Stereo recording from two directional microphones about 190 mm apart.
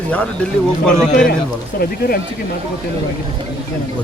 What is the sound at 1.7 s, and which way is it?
Speech, 55° left (ahead or behind).